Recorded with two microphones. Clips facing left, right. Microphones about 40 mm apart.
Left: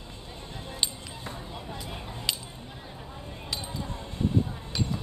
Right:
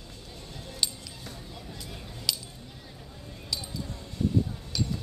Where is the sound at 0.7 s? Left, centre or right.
Left.